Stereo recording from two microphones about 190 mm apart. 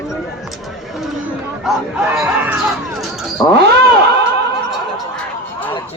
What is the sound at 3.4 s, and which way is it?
Speech, 10° left (ahead or behind).